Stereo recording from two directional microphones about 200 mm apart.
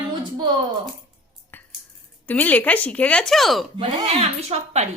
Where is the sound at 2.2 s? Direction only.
10° left (ahead or behind).